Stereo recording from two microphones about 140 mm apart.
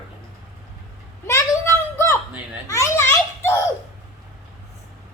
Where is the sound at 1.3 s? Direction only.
20° left (ahead or behind).